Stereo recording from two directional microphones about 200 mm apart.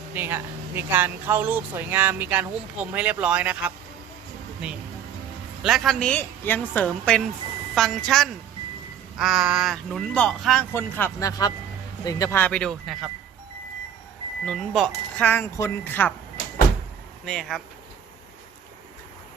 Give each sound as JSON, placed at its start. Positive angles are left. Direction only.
{"t": 0.1, "sound": "speech", "side_deg": -10}
{"t": 14.4, "sound": "speech", "side_deg": 0}
{"t": 17.2, "sound": "speech", "side_deg": 0}